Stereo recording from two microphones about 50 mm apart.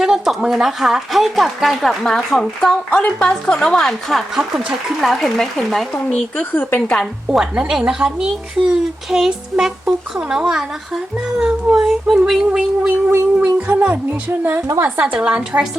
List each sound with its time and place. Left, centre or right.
0.0 s a woman's voice: centre
2.0 s a woman's voice: centre
6.1 s speech: left
6.5 s a woman's voice: left
6.7 s speech: centre
7.7 s speech: centre
9.0 s a woman's voice: centre
13.1 s speech: right
13.7 s a woman's voice: right
14.3 s a woman's voice: right
15.1 s a woman's voice: right